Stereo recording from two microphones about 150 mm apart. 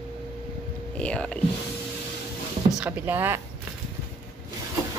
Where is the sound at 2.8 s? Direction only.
15° right (ahead or behind).